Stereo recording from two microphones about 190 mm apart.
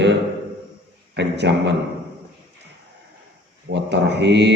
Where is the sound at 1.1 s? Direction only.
65° right (ahead or behind).